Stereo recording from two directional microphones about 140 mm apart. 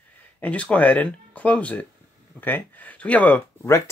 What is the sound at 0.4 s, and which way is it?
Speech, 10° left (ahead or behind).